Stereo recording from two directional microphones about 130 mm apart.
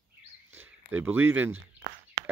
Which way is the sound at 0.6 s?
15° right (ahead or behind).